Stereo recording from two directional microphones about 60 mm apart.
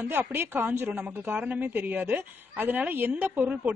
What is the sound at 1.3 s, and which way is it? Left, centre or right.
Speech, right.